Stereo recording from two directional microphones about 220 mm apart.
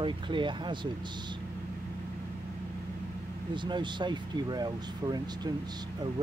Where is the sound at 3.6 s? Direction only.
20° right (ahead or behind).